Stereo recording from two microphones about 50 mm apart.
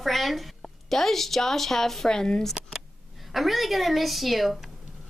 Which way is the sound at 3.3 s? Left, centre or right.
Centre.